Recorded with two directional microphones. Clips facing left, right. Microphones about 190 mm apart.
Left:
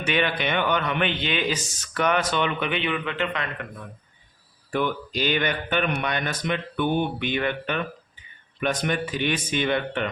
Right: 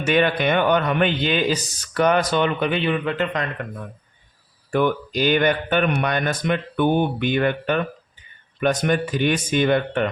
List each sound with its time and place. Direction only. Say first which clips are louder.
0.0 s speech: right 6 dB; 45° right (ahead or behind)
4.7 s speech: right 5 dB; 50° right (ahead or behind)